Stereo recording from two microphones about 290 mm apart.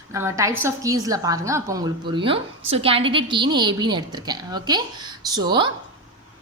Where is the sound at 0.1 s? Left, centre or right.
Centre.